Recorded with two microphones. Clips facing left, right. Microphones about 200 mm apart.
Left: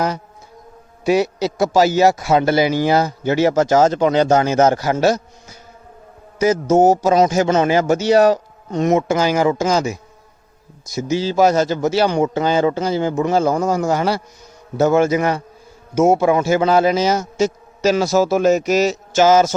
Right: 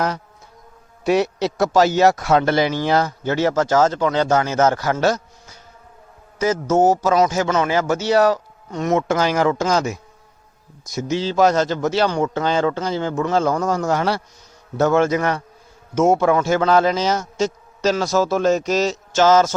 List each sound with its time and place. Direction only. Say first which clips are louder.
1.0 s a man's voice: left 1 dB; centre (ahead or behind); by 9.0 s 20° left (ahead or behind)
9.0 s a man's voice: left 2 dB; 5° left (ahead or behind)